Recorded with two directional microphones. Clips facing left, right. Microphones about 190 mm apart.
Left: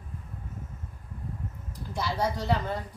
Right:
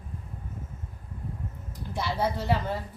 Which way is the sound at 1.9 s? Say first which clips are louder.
Right 1 dB; 5° right (ahead or behind).